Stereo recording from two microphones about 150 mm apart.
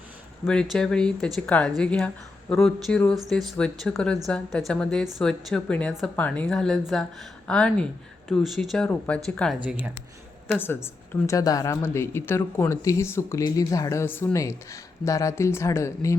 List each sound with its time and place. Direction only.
0.4 s speech: 5° left (ahead or behind); by 16.1 s 20° left (ahead or behind)